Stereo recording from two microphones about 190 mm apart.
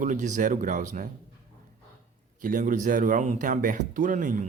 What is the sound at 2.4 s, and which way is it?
Speech, 45° right (ahead or behind).